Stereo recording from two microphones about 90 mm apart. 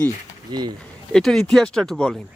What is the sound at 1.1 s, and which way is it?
Speech, 5° left (ahead or behind).